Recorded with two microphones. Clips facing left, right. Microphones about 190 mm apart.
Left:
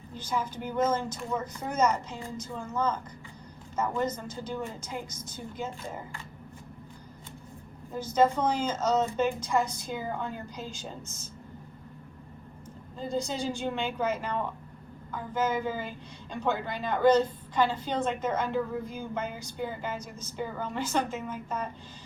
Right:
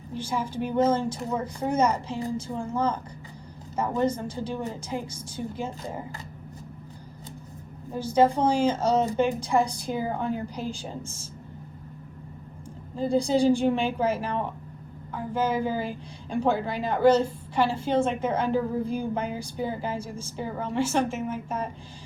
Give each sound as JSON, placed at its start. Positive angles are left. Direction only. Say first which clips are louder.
{"t": 0.2, "sound": "a woman's voice", "louder": "right 3 dB", "side_deg": -30}
{"t": 7.9, "sound": "a woman's voice", "louder": "right 3 dB", "side_deg": -30}
{"t": 13.0, "sound": "a woman's voice", "louder": "right 9 dB", "side_deg": -30}